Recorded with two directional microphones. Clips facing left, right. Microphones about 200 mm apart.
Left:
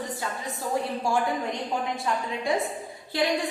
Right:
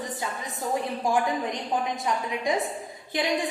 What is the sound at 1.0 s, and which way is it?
A woman's voice, 20° right (ahead or behind).